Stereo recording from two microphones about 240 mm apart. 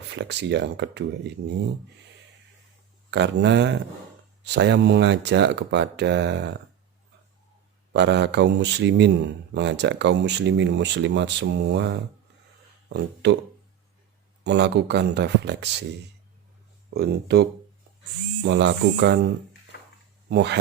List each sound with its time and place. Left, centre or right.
0.1 s a man's voice: right
3.1 s a man's voice: right
7.9 s a man's voice: right
12.9 s speech: right
14.4 s a man's voice: right
16.9 s a man's voice: right
19.7 s a sound: left
20.3 s a man's voice: right